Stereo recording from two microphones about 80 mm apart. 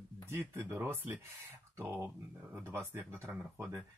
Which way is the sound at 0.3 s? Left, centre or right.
Right.